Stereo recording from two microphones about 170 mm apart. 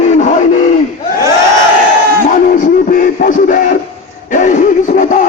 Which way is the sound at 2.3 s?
50° left (ahead or behind).